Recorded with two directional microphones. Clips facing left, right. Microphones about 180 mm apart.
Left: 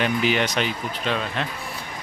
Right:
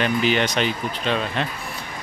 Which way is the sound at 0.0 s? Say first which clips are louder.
Right 1 dB; 10° left (ahead or behind).